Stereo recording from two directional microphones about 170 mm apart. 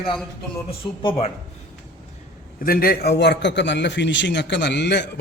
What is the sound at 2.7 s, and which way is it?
A man's voice, 60° left (ahead or behind).